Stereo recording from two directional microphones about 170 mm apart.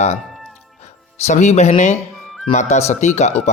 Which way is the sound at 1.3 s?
45° left (ahead or behind).